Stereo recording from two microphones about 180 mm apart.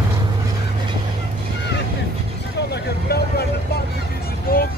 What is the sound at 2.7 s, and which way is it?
Vehicle, 65° left (ahead or behind).